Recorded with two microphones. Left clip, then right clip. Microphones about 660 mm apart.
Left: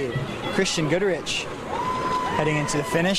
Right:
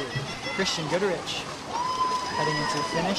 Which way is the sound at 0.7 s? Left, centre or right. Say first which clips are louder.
Left 2 dB; left.